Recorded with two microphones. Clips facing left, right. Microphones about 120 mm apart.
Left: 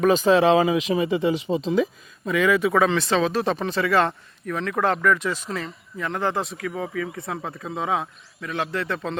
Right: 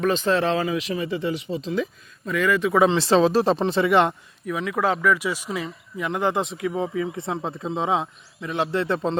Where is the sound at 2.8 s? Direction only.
25° right (ahead or behind).